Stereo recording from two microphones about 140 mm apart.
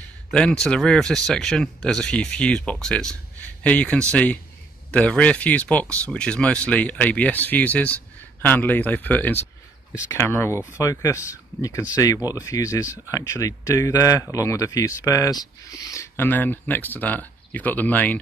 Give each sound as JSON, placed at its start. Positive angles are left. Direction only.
{"t": 0.3, "sound": "speech", "side_deg": 5}